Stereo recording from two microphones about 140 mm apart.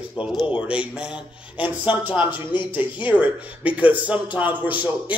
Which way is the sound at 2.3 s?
35° left (ahead or behind).